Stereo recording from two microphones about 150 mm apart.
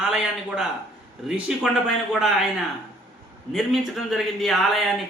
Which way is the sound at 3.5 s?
Centre (ahead or behind).